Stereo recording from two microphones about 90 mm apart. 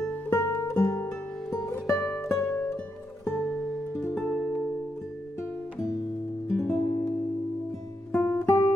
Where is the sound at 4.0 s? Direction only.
20° left (ahead or behind).